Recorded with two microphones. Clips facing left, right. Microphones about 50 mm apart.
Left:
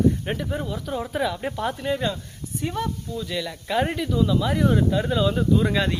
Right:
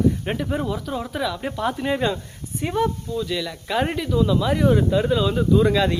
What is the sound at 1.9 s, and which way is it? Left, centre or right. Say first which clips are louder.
Speech: right 3 dB; right.